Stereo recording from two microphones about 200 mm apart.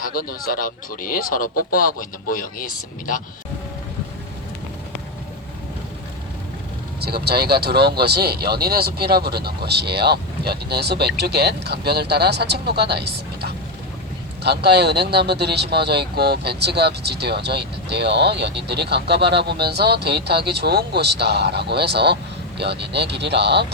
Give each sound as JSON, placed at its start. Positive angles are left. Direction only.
{"t": 0.0, "sound": "speech", "side_deg": 45}
{"t": 7.0, "sound": "speech", "side_deg": -50}